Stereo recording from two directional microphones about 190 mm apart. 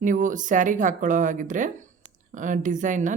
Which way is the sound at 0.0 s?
40° right (ahead or behind).